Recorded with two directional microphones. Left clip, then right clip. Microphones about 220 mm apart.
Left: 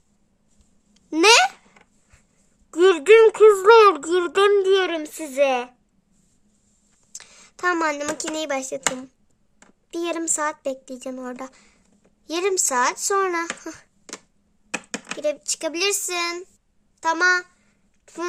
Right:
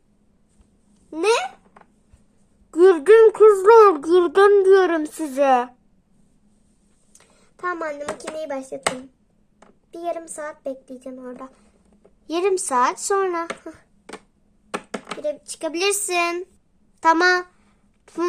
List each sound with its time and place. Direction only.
1.1 s babbling: 20° left (ahead or behind)
2.6 s a sound: 15° left (ahead or behind)
4.4 s a child's voice: 15° left (ahead or behind)
7.1 s speech: 20° left (ahead or behind)
9.9 s a woman's voice: 30° left (ahead or behind)
12.2 s a child's voice: 10° left (ahead or behind)
15.2 s a child's voice: 20° left (ahead or behind); by 16.5 s 5° left (ahead or behind)
17.0 s a sound: 5° right (ahead or behind)